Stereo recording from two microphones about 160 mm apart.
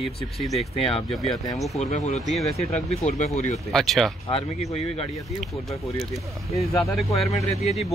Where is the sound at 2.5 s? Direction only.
40° left (ahead or behind).